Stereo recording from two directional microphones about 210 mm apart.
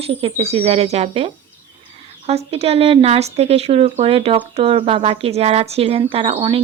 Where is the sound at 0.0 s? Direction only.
25° right (ahead or behind).